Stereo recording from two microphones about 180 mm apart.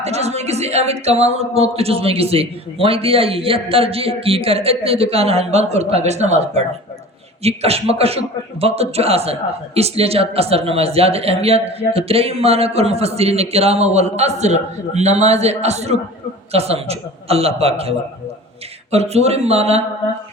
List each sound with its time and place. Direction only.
0.0 s a man's voice: 35° right (ahead or behind)